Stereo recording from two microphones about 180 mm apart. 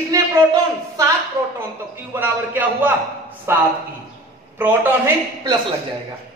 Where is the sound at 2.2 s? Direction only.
10° right (ahead or behind).